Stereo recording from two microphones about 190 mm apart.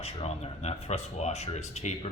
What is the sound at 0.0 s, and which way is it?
Speech, 35° left (ahead or behind).